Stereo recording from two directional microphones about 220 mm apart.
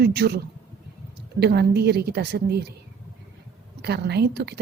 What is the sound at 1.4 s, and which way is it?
A woman's voice, 50° right (ahead or behind).